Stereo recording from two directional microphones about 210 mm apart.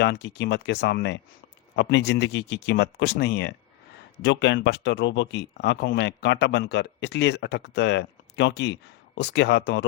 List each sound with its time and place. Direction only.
0.0 s speech: 55° left (ahead or behind)